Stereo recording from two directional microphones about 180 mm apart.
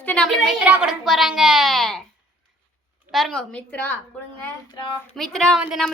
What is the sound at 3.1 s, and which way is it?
Speech, centre (ahead or behind).